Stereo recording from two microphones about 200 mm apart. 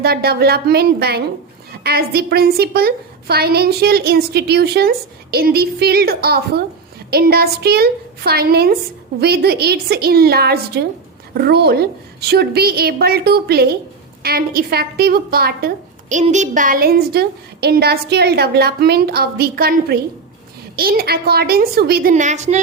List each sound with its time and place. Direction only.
0.0 s a woman's voice: 50° right (ahead or behind)
22.1 s a woman's voice: 35° right (ahead or behind)